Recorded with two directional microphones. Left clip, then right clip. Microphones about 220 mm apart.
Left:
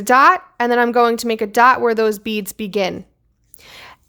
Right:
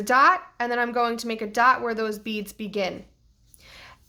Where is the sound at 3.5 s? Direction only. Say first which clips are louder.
Left 8 dB; 40° left (ahead or behind).